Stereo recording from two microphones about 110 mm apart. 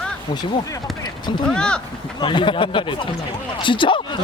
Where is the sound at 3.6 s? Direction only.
50° left (ahead or behind).